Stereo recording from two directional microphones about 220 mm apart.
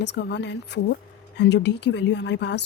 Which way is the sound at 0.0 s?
50° left (ahead or behind).